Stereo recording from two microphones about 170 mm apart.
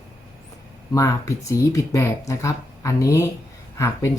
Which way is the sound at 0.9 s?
15° left (ahead or behind).